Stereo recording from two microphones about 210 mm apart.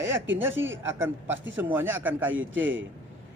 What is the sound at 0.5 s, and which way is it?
Speech, 65° right (ahead or behind).